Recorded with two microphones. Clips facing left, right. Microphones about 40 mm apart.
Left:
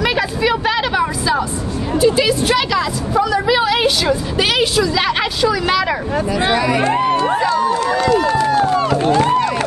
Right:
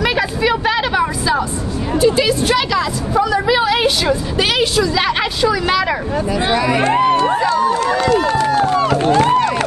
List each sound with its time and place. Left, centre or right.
0.0 s a sound: centre
2.0 s a woman's voice: centre
6.8 s speech: right
7.2 s run: centre
7.7 s run: right